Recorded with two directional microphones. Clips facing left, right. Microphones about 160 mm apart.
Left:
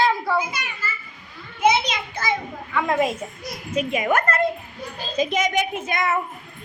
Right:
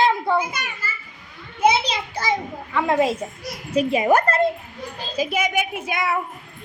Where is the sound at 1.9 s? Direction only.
30° right (ahead or behind).